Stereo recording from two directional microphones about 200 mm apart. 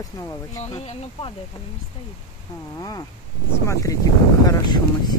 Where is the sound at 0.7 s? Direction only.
30° left (ahead or behind).